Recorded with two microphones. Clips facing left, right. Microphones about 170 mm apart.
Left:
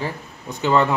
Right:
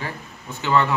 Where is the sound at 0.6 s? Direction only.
40° left (ahead or behind).